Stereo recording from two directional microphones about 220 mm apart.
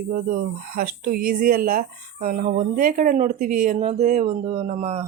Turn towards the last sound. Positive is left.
turn(degrees=-30)  # may be behind; listen again after turning